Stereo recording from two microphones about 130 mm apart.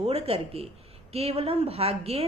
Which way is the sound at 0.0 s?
50° right (ahead or behind).